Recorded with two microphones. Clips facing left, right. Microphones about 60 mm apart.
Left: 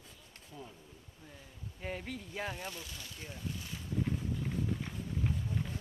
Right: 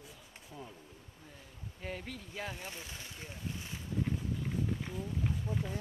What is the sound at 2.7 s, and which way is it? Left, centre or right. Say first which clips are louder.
Speech: even; right.